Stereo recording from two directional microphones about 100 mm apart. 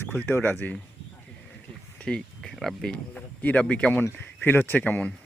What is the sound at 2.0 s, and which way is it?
Speech, 10° left (ahead or behind).